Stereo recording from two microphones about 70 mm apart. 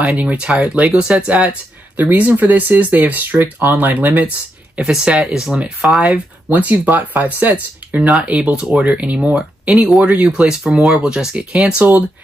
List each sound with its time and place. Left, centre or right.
0.0 s speech: right; by 6.1 s centre
6.1 s speech: right
8.1 s speech: centre
10.8 s speech: centre
11.1 s speech: centre